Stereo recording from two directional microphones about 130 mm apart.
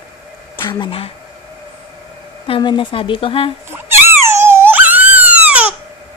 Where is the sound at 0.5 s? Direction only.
35° left (ahead or behind).